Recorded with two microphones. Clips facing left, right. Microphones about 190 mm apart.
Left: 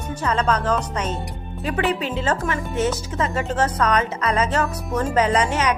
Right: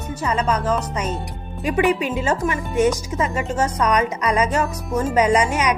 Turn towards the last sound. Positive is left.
turn(degrees=-10)  # may be behind; listen again after turning